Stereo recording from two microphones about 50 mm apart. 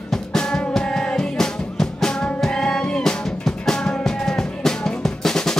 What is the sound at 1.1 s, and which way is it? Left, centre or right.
Music, centre.